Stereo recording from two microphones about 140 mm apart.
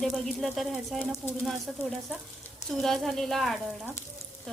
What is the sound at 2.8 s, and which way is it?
Speech, centre (ahead or behind).